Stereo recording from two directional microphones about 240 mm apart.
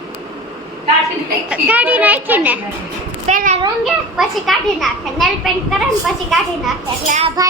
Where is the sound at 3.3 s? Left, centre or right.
Right.